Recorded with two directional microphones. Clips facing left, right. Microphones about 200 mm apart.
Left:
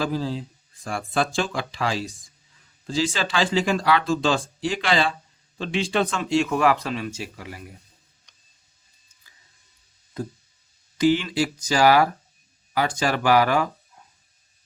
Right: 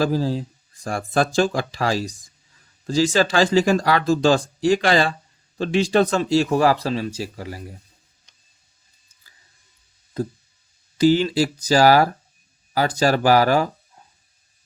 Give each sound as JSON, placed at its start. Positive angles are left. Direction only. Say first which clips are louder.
{"t": 0.0, "sound": "speech", "louder": "right 5 dB", "side_deg": -40}
{"t": 10.9, "sound": "speech", "louder": "right 4 dB", "side_deg": -35}